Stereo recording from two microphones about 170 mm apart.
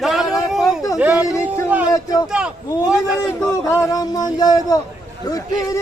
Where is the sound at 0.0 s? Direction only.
Centre (ahead or behind).